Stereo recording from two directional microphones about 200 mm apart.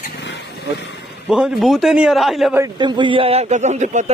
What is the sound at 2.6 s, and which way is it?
A man's voice, 20° right (ahead or behind).